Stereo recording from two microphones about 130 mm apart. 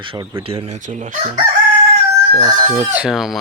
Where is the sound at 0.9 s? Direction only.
90° right.